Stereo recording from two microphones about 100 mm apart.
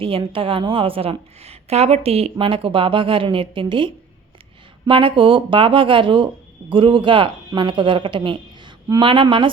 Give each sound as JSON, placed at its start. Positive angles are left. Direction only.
{"t": 0.0, "sound": "a woman's voice", "side_deg": -60}